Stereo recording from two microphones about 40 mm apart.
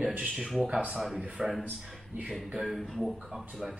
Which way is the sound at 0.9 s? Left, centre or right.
Centre.